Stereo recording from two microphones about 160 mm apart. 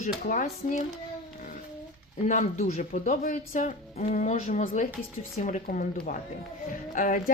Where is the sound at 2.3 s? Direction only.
45° left (ahead or behind).